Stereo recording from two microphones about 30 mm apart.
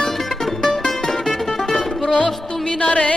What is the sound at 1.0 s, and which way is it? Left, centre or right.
Music, centre.